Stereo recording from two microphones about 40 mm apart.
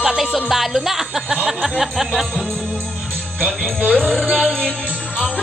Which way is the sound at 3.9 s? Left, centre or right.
Centre.